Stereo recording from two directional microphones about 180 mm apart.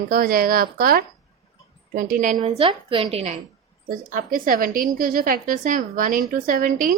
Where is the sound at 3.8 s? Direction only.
50° right (ahead or behind).